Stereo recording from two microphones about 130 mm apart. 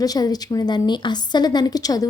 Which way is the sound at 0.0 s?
30° left (ahead or behind).